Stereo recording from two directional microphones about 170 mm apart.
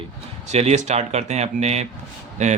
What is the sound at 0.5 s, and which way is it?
A man's voice, 40° right (ahead or behind).